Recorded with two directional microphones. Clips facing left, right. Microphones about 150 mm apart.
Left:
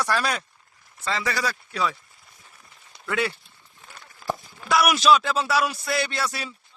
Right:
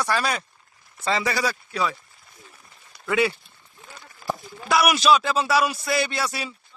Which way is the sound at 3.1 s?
5° right (ahead or behind).